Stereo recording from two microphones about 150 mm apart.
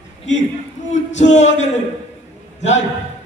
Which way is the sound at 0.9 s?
50° left (ahead or behind).